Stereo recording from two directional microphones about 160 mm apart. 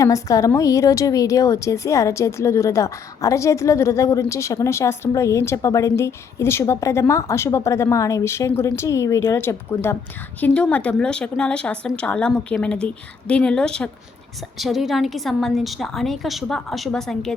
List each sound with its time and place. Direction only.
0.0 s a woman's voice: 20° left (ahead or behind); by 17.3 s 5° left (ahead or behind)